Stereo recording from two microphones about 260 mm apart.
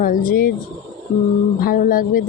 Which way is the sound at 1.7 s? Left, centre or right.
Left.